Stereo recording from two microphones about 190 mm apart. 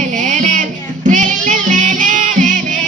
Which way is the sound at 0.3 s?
40° right (ahead or behind).